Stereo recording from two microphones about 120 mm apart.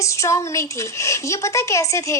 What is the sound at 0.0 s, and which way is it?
A woman's voice, 25° left (ahead or behind).